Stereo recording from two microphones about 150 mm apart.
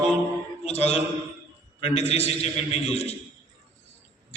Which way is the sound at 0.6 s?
45° left (ahead or behind).